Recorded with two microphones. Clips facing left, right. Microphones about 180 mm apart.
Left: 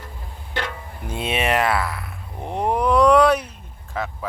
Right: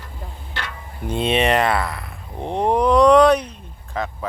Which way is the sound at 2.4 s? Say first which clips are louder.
Right 3 dB; 25° right (ahead or behind).